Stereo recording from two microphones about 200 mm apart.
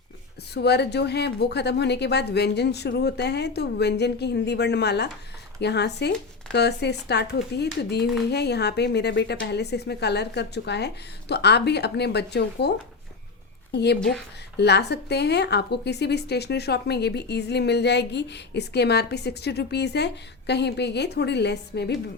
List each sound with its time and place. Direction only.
0.5 s a woman's voice: 55° left (ahead or behind)